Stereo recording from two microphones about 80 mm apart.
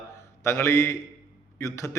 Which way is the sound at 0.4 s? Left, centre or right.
Left.